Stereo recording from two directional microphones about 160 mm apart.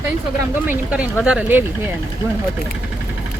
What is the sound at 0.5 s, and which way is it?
Speech, 10° right (ahead or behind).